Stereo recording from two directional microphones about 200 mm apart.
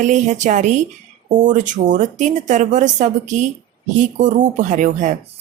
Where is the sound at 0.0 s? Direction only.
35° right (ahead or behind).